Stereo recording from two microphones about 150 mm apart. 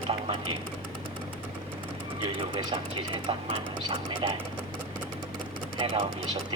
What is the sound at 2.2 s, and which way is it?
Speech, 35° right (ahead or behind).